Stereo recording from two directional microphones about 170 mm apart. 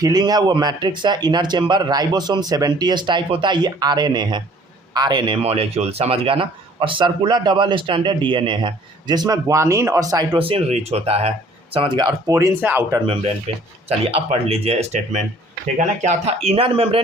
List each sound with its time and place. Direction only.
0.0 s speech: 20° right (ahead or behind)
13.5 s speech: 40° right (ahead or behind)